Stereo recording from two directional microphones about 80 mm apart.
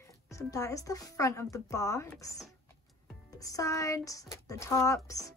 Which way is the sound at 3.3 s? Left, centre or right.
Left.